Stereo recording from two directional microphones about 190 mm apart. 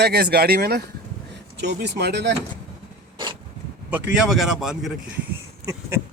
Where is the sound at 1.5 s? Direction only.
65° right (ahead or behind).